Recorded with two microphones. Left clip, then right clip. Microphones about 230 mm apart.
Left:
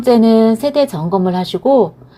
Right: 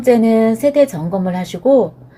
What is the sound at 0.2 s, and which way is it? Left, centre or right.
A woman's voice, left.